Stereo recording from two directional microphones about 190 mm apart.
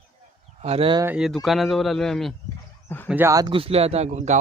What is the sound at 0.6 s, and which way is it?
Speech, 30° right (ahead or behind).